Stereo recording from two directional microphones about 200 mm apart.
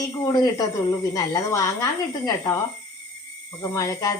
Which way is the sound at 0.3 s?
20° left (ahead or behind).